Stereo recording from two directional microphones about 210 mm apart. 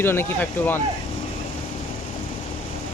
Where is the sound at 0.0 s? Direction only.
10° left (ahead or behind).